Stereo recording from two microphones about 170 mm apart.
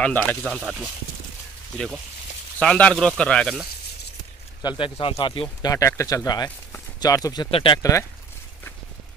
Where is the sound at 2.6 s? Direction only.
5° left (ahead or behind).